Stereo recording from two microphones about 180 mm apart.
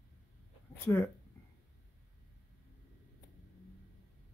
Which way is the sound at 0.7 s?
10° left (ahead or behind).